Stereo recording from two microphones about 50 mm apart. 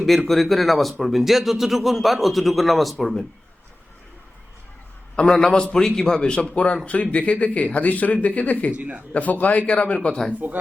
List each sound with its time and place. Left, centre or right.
0.3 s speech: centre
5.2 s speech: centre; by 8.7 s left
8.8 s speech: right
9.1 s a man's voice: left
10.4 s speech: right